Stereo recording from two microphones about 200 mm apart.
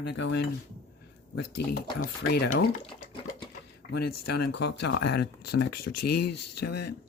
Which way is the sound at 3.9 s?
55° left (ahead or behind).